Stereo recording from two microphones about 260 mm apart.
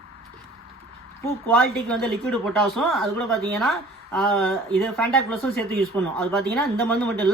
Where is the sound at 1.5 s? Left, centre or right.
Centre.